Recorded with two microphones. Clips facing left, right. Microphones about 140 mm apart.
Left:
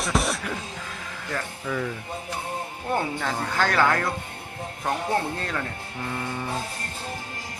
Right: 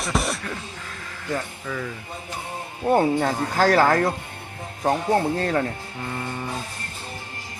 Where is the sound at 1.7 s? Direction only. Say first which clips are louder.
Left 2 dB; 5° left (ahead or behind).